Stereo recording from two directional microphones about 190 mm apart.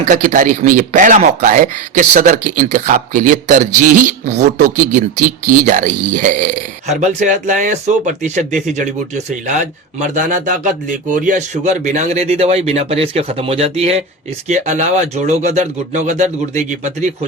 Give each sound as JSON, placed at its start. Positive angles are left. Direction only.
{"t": 0.0, "sound": "speech", "side_deg": -40}